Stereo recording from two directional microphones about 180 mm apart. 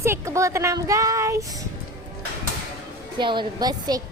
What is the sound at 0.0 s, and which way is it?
Speech, 15° right (ahead or behind).